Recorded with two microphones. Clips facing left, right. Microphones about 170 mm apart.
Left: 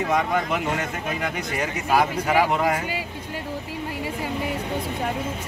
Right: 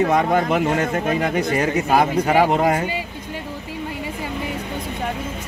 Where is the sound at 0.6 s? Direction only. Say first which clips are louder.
Right 7 dB; 50° right (ahead or behind).